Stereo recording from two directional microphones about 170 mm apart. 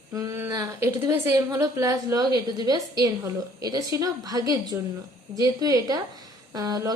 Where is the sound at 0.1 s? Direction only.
20° right (ahead or behind).